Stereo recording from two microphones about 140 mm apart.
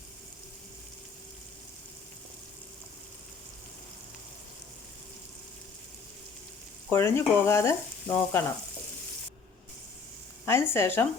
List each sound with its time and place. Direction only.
6.9 s frying: 20° left (ahead or behind)
10.4 s speech: 20° left (ahead or behind)